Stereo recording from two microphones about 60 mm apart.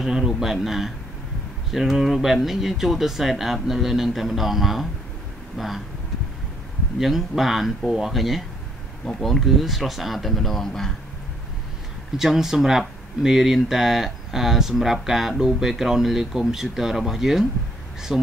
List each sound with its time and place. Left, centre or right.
0.0 s speech: centre
7.0 s speech: centre
12.2 s speech: centre